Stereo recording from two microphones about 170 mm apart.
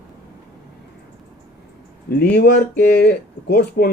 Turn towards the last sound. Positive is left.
turn(degrees=70)  # may be behind; listen again after turning